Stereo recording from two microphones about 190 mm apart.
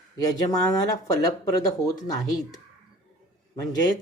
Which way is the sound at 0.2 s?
20° left (ahead or behind).